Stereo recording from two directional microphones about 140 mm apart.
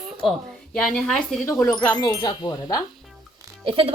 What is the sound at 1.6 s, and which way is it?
A woman's voice, 30° left (ahead or behind).